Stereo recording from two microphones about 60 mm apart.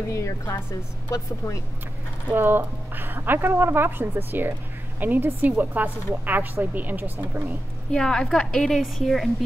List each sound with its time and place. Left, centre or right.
0.1 s a woman's voice: left
2.3 s a woman's voice: right
7.9 s a woman's voice: centre